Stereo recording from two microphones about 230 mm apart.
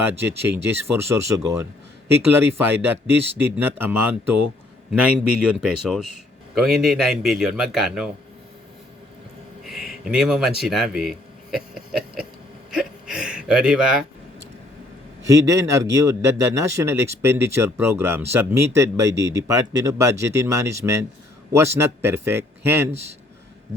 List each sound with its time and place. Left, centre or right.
0.4 s a man's voice: centre
9.6 s a sound: centre
10.6 s a man's voice: centre
11.5 s a sound: centre
12.7 s hiccup: centre
15.3 s a man's voice: centre
19.1 s speech: right
19.5 s a man's voice: centre